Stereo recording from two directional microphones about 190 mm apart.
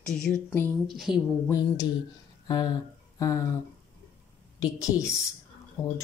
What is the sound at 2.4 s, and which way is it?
Speech, 20° left (ahead or behind).